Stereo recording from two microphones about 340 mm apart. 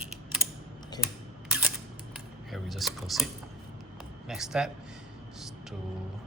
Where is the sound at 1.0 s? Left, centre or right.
Centre.